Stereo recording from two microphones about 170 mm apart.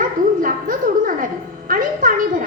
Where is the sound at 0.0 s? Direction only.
55° right (ahead or behind).